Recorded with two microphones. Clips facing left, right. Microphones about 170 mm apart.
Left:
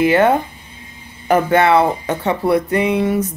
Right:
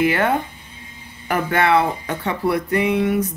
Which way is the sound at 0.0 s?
25° left (ahead or behind).